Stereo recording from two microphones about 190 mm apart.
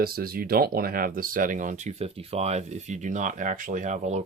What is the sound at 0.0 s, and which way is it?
Speech, 50° right (ahead or behind).